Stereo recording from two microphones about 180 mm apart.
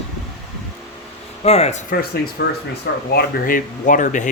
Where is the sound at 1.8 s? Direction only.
55° left (ahead or behind).